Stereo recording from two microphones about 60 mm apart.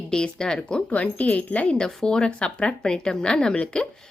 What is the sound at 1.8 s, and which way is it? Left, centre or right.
A woman's voice, centre.